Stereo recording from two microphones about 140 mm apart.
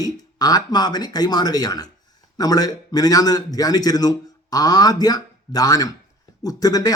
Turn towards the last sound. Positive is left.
turn(degrees=25)  # may be behind; listen again after turning